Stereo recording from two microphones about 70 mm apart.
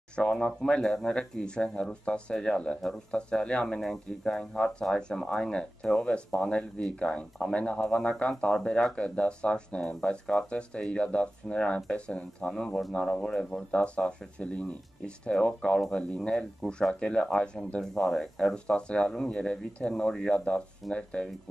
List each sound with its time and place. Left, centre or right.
0.1 s speech: centre